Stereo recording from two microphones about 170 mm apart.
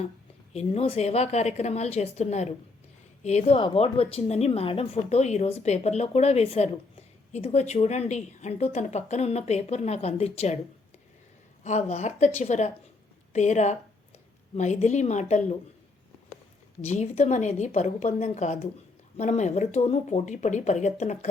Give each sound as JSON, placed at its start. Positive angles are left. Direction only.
{"t": 0.5, "sound": "speech", "side_deg": 35}
{"t": 11.6, "sound": "speech", "side_deg": 40}
{"t": 16.8, "sound": "speech", "side_deg": 40}